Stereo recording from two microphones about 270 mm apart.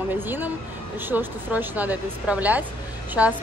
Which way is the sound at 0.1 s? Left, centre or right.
Centre.